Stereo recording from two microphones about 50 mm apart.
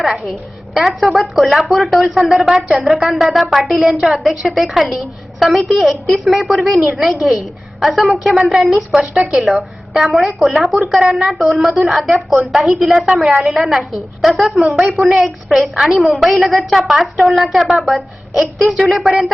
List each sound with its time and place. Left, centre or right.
0.0 s a woman's voice: centre
8.9 s speech: centre
9.2 s a woman's voice: centre